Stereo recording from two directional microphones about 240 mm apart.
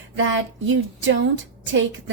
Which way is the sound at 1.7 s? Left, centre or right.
Right.